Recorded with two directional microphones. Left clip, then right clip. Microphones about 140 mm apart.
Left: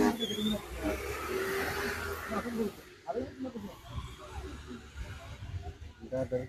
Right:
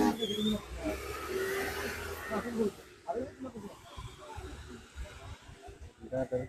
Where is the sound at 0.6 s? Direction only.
10° right (ahead or behind); by 2.6 s 15° left (ahead or behind).